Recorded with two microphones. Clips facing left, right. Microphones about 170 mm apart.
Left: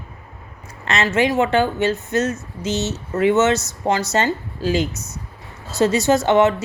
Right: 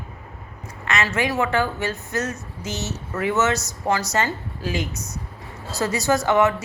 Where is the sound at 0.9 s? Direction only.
25° left (ahead or behind).